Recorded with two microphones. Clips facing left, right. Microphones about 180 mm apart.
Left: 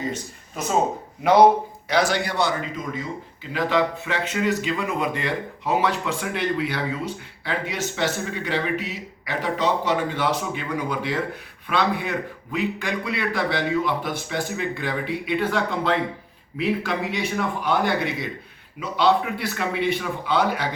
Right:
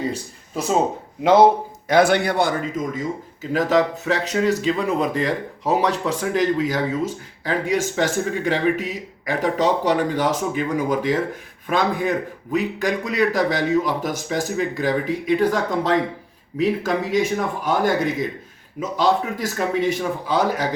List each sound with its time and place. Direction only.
1.9 s a man's voice: 55° right (ahead or behind); by 20.7 s 40° right (ahead or behind)